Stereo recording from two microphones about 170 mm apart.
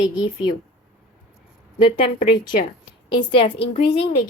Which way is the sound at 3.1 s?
30° left (ahead or behind).